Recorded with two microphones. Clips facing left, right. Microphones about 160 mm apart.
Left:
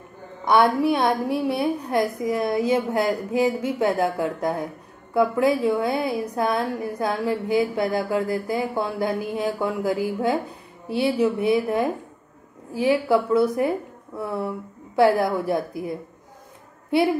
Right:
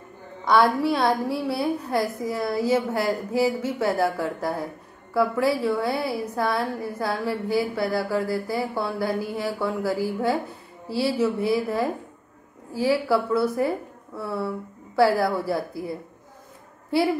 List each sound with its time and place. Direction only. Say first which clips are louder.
0.6 s a woman's voice: left 2 dB; 20° left (ahead or behind)